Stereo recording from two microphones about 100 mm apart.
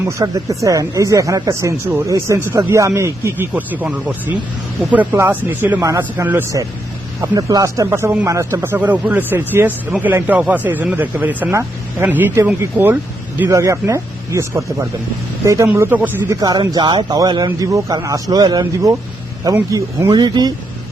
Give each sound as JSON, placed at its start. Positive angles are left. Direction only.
{"t": 0.2, "sound": "speech", "side_deg": -35}
{"t": 7.2, "sound": "speech", "side_deg": -35}
{"t": 13.5, "sound": "speech", "side_deg": -30}
{"t": 16.3, "sound": "speech", "side_deg": -45}